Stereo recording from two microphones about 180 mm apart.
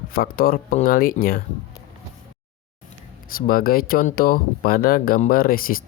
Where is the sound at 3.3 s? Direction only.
55° left (ahead or behind).